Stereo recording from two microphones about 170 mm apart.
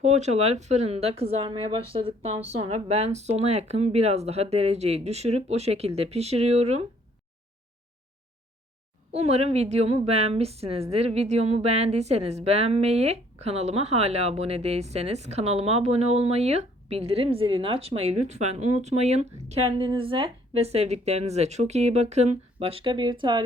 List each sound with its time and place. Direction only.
0.0 s a woman's voice: 40° right (ahead or behind)
9.1 s a woman's voice: 40° right (ahead or behind)